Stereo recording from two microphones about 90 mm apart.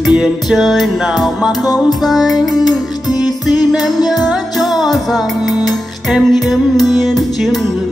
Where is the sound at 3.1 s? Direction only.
45° left (ahead or behind).